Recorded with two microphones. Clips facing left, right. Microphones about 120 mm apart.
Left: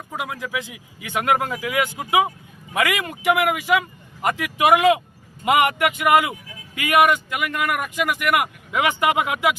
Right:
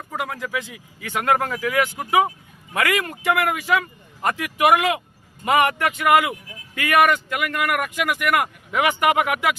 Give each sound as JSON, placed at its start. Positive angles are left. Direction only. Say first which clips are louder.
{"t": 0.1, "sound": "speech", "louder": "right 1 dB", "side_deg": 15}